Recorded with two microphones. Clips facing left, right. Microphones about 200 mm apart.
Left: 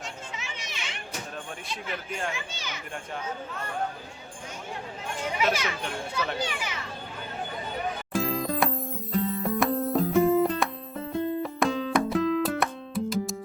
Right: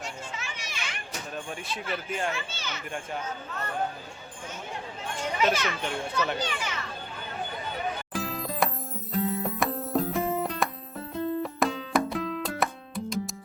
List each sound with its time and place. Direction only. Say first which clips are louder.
0.0 s children playing: right 1 dB; 20° left (ahead or behind)
2.3 s a child's voice: right 1 dB; 15° left (ahead or behind)
5.4 s a child's voice: right 2 dB; 10° left (ahead or behind)
8.1 s music: left 5 dB; centre (ahead or behind)